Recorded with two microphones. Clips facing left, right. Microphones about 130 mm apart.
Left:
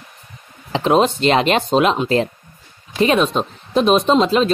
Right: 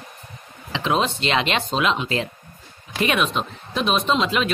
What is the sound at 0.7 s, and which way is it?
Speech, 40° left (ahead or behind).